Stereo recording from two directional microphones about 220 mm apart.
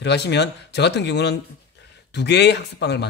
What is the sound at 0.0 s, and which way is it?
Speech, 50° left (ahead or behind).